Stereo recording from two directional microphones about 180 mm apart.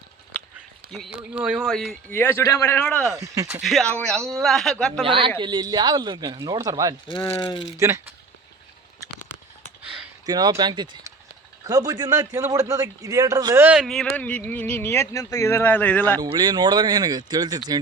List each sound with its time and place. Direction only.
1.3 s speech: 5° right (ahead or behind)
3.2 s speech: 20° right (ahead or behind)
3.6 s speech: centre (ahead or behind)
5.0 s a man's voice: 30° right (ahead or behind)
7.1 s speech: 30° left (ahead or behind)
7.8 s speech: 15° right (ahead or behind)
10.2 s a man's voice: 20° right (ahead or behind)
13.7 s speech: centre (ahead or behind)
16.2 s a man's voice: 20° right (ahead or behind)